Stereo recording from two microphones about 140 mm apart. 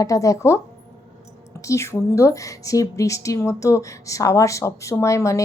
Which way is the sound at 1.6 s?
20° left (ahead or behind).